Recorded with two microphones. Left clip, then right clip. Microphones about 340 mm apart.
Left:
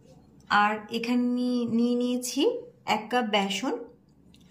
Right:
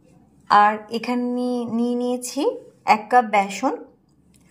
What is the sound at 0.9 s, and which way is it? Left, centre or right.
A woman's voice, centre.